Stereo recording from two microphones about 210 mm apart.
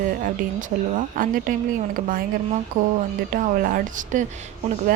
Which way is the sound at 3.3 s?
40° right (ahead or behind).